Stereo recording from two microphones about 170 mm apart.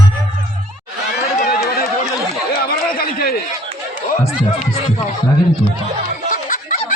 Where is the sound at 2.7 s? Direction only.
60° left (ahead or behind).